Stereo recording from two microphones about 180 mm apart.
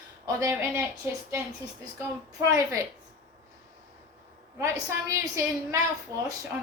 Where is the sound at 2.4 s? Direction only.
20° right (ahead or behind).